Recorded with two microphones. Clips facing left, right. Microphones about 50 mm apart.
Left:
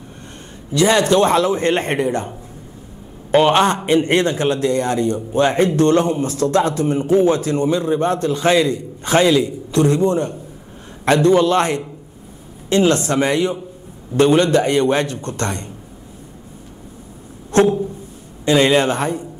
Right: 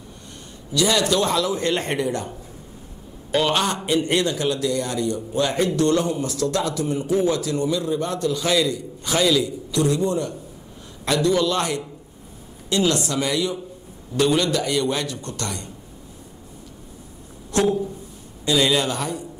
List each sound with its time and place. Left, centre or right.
0.7 s a man's voice: left
17.5 s a sound: left
18.4 s a man's voice: left